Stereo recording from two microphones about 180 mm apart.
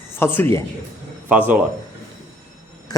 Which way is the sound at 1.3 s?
10° right (ahead or behind).